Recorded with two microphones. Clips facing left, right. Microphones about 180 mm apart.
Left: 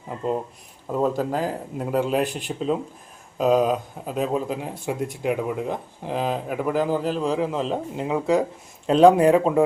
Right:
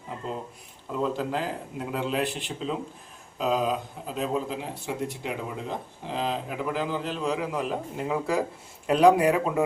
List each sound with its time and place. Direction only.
0.9 s speech: 45° left (ahead or behind); by 8.4 s 20° left (ahead or behind)
8.9 s speech: 30° left (ahead or behind)